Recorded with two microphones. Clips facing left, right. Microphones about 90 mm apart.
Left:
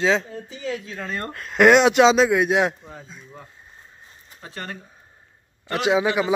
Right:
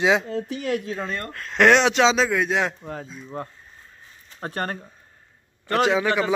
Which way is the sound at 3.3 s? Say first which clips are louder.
Right 10 dB; 55° right (ahead or behind).